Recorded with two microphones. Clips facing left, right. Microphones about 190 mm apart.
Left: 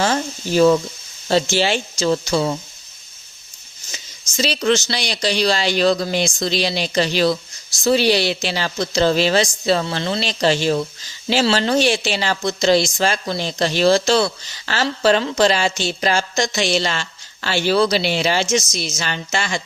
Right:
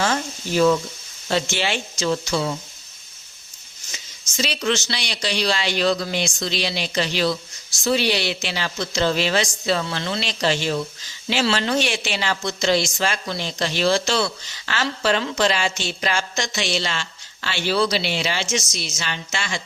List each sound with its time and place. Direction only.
0.0 s speech: 35° left (ahead or behind)
4.4 s speech: 35° left (ahead or behind)